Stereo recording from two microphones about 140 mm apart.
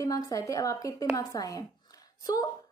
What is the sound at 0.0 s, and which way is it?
A woman's voice, 25° left (ahead or behind).